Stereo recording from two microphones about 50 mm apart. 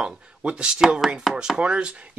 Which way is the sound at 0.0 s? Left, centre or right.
Right.